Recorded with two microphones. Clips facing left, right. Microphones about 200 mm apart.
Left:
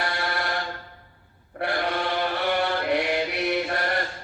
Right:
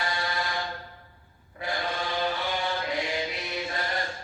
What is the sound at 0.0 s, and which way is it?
Fire alarm, 65° left (ahead or behind).